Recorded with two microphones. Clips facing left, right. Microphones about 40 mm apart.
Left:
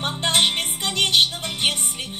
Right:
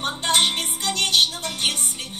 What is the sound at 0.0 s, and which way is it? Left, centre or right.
Music, left.